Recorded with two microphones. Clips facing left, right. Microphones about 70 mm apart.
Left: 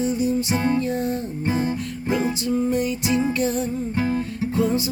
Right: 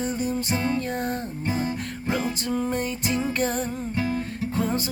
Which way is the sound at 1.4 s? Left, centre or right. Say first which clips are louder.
Left 4 dB; left.